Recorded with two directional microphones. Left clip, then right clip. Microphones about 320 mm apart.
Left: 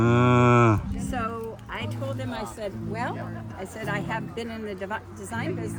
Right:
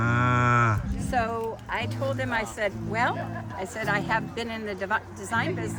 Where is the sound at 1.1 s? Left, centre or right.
Right.